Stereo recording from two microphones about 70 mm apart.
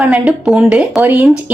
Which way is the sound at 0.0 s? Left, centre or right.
Centre.